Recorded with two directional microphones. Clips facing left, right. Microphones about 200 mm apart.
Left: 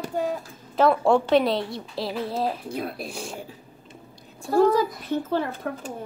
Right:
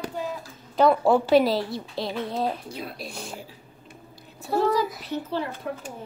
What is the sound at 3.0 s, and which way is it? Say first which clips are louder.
Speech: left 3 dB; centre (ahead or behind).